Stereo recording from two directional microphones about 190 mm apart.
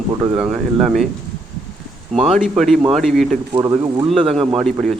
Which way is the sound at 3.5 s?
25° right (ahead or behind).